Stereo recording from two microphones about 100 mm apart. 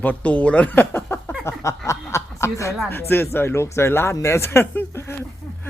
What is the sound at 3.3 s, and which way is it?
Speech, 25° left (ahead or behind).